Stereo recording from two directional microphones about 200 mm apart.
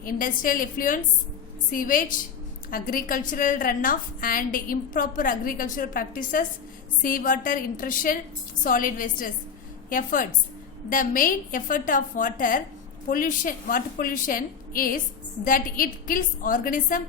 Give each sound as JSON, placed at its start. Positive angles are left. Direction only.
{"t": 0.0, "sound": "a woman's voice", "side_deg": 45}